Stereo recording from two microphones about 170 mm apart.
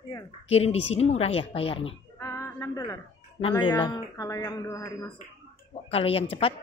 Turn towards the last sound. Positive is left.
turn(degrees=35)  # may be behind; listen again after turning